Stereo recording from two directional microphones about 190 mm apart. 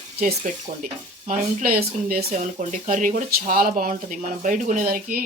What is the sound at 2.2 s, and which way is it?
Speech, 40° right (ahead or behind).